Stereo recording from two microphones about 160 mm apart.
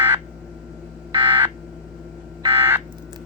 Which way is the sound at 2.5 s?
15° right (ahead or behind).